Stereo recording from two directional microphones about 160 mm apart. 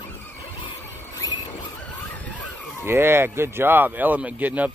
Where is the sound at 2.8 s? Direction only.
15° right (ahead or behind).